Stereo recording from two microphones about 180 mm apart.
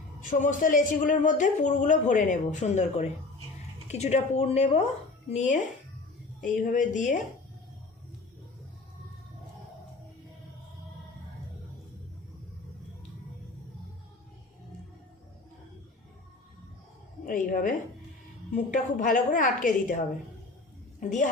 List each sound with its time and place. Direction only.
0.2 s speech: 45° left (ahead or behind)
17.2 s a woman's voice: 45° left (ahead or behind)